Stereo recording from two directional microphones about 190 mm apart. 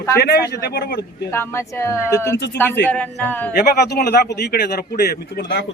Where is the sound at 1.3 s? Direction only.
15° left (ahead or behind).